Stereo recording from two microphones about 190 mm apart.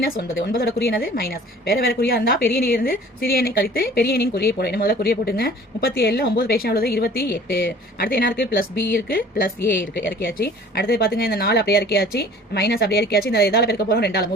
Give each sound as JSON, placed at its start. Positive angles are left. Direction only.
{"t": 0.5, "sound": "a woman's voice", "side_deg": 50}